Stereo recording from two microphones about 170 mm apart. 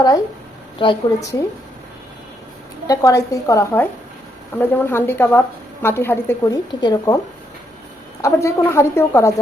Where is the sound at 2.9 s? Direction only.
20° left (ahead or behind).